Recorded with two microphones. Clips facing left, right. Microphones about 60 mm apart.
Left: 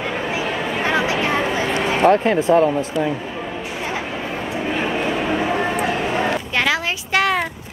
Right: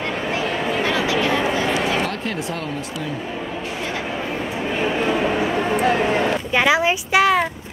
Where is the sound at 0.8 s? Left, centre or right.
Left.